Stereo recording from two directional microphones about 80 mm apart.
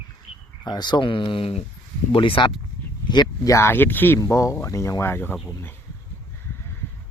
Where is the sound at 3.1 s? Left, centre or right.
Left.